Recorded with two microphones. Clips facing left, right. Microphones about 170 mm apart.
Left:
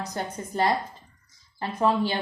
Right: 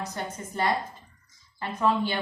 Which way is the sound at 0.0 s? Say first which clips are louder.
Left 2 dB; 35° left (ahead or behind).